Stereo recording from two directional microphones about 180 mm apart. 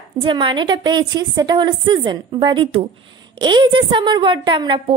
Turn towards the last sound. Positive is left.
turn(degrees=-25)  # may be behind; listen again after turning